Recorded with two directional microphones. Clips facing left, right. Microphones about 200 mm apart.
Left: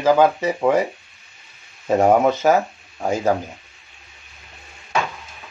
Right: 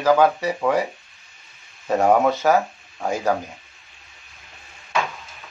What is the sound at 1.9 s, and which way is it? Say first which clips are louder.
Speech: left 2 dB; 20° left (ahead or behind).